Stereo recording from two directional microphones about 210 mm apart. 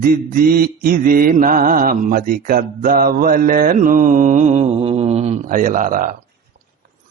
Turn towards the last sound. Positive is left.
turn(degrees=-40)  # may be behind; listen again after turning